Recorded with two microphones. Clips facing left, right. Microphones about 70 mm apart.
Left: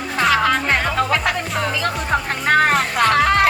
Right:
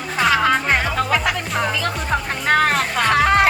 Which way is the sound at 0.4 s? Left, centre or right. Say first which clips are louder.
Even; centre.